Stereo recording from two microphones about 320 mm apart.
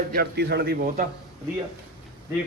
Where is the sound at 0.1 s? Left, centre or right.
Right.